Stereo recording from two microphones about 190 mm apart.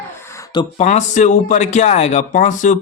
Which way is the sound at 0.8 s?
35° left (ahead or behind).